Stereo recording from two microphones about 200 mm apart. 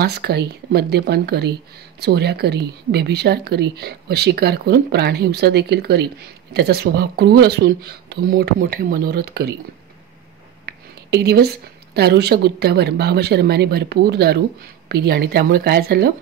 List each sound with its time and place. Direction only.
0.0 s speech: 55° right (ahead or behind)
10.6 s a woman's voice: 55° right (ahead or behind)